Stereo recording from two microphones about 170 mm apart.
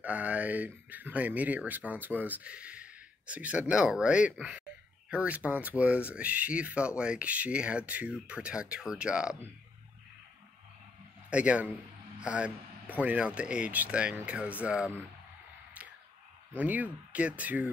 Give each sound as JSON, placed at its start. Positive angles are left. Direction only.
{"t": 0.0, "sound": "speech", "side_deg": -10}
{"t": 11.2, "sound": "a man's voice", "side_deg": -5}
{"t": 16.5, "sound": "speech", "side_deg": -10}